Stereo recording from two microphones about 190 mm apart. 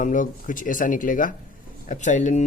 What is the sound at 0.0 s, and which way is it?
Speech, 45° left (ahead or behind).